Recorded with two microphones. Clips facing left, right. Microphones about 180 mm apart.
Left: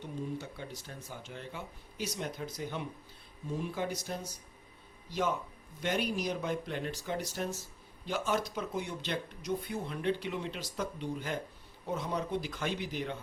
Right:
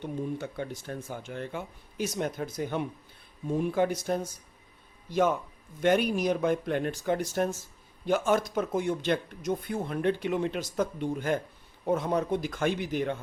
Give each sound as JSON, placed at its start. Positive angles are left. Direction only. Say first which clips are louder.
{"t": 0.0, "sound": "speech", "louder": "right 6 dB", "side_deg": -55}
{"t": 5.8, "sound": "speech", "louder": "right 8 dB", "side_deg": -55}